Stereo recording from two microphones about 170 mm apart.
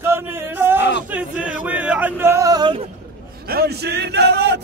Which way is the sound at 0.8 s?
90° left.